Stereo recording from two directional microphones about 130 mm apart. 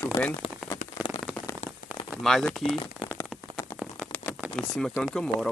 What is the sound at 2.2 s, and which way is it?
Speech, 5° left (ahead or behind).